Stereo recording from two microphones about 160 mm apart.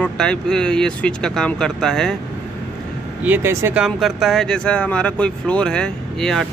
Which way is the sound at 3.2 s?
15° right (ahead or behind).